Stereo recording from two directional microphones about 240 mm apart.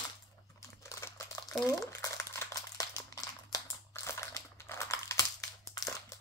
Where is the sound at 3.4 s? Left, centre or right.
Centre.